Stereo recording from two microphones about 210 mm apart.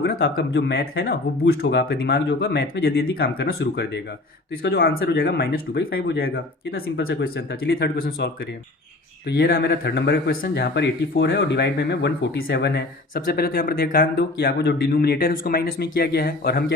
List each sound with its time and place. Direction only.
0.0 s speech: 50° left (ahead or behind)